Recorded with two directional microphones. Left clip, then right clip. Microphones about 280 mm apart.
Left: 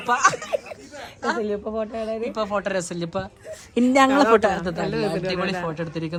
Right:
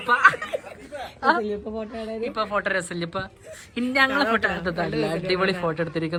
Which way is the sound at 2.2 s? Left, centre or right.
Centre.